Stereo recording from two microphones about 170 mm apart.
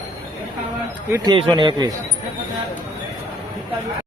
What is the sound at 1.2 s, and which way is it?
Speech, 25° right (ahead or behind).